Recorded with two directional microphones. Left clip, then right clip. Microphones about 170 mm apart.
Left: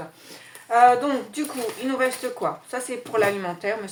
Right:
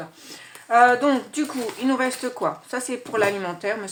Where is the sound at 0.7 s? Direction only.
40° right (ahead or behind).